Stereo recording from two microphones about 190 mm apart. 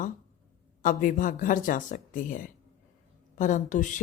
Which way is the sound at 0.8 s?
45° left (ahead or behind).